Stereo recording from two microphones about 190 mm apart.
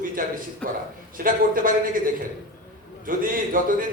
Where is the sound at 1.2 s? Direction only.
45° right (ahead or behind).